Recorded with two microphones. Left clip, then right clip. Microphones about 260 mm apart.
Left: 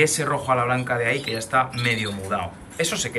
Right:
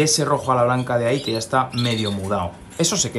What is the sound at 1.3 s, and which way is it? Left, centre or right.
Speech, centre.